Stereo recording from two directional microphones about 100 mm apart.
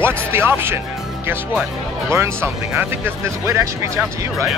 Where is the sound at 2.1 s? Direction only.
25° right (ahead or behind).